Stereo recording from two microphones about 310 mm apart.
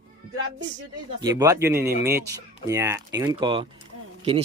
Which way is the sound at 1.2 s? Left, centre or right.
Centre.